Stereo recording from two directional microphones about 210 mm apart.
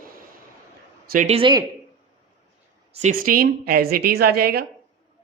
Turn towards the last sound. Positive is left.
turn(degrees=-45)  # may be behind; listen again after turning